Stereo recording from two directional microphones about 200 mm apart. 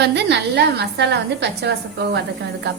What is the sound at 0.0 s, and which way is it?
A woman's voice, 55° right (ahead or behind).